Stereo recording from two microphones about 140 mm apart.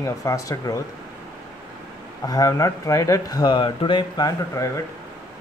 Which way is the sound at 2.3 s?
25° left (ahead or behind).